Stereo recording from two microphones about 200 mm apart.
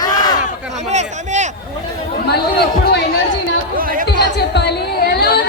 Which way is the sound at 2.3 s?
55° left (ahead or behind).